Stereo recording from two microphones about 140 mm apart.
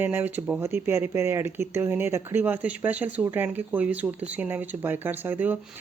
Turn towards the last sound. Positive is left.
turn(degrees=-15)  # may be behind; listen again after turning